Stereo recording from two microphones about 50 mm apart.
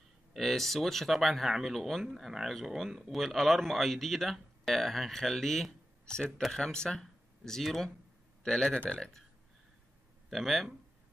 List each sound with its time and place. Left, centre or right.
0.4 s a man's voice: centre
8.6 s speech: left
10.3 s a man's voice: centre